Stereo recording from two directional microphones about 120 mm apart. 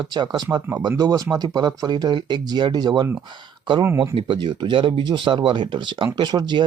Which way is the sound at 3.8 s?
25° right (ahead or behind).